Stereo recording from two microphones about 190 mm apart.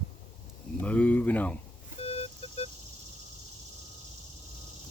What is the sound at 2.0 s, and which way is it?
Vehicle, 30° left (ahead or behind).